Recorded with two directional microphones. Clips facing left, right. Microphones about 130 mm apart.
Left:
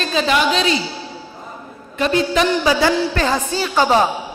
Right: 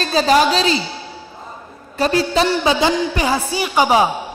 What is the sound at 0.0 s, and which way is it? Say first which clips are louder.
Speech: right 3 dB; 35° right (ahead or behind).